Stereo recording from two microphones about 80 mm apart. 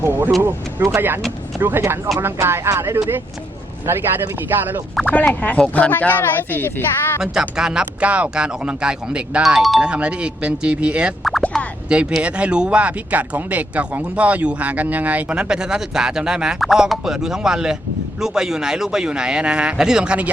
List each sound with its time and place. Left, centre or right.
0.0 s speech: right
5.1 s a woman's voice: centre
7.2 s speech: centre
9.8 s speech: centre
11.2 s plop: centre
11.9 s speech: centre
15.4 s speech: centre